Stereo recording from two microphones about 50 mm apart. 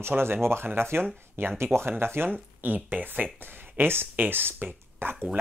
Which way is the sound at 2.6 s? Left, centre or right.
Right.